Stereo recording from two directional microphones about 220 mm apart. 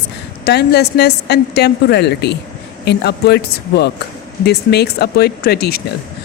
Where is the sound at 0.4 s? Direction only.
50° left (ahead or behind).